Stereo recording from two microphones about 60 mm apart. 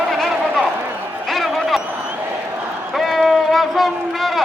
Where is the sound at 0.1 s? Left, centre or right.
Centre.